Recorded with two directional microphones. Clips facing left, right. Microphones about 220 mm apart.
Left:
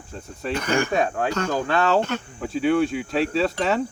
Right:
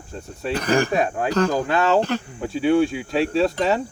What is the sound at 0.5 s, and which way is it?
Speech, 35° right (ahead or behind).